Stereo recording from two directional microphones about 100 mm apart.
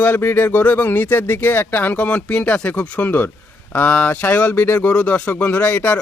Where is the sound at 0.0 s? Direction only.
20° left (ahead or behind).